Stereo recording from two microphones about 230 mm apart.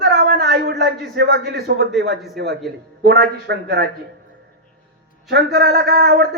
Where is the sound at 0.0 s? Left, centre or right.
Right.